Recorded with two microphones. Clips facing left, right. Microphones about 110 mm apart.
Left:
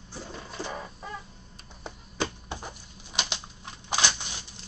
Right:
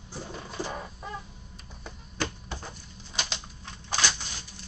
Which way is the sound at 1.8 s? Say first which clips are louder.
Left 2 dB; 20° left (ahead or behind).